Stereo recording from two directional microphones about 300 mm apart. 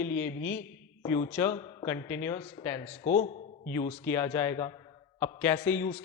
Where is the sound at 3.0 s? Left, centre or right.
Left.